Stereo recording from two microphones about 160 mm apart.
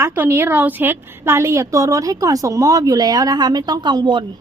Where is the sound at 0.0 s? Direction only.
15° right (ahead or behind); by 4.3 s 30° right (ahead or behind).